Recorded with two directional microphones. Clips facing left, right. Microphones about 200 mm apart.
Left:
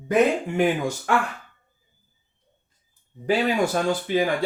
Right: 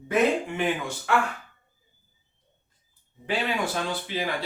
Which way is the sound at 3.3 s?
45° left (ahead or behind).